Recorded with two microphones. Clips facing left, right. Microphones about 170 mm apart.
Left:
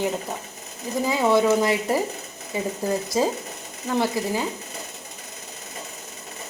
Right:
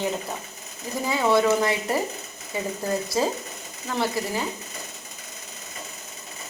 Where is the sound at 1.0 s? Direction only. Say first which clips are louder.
Left 1 dB; 15° left (ahead or behind).